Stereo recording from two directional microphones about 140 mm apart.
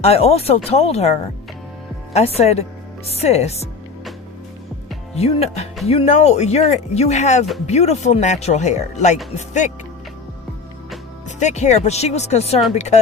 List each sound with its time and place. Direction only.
0.0 s speech: 50° left (ahead or behind)
2.1 s speech: 50° left (ahead or behind)
5.1 s speech: 50° left (ahead or behind)
11.3 s speech: 55° left (ahead or behind)